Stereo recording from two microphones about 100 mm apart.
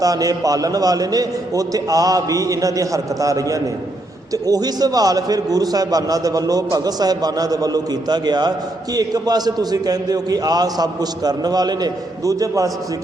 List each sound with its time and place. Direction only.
0.0 s a man's voice: 35° right (ahead or behind)